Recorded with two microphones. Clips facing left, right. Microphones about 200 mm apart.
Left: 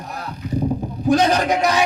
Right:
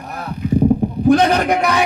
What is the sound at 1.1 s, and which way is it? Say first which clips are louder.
Speech: right 3 dB; 55° right (ahead or behind).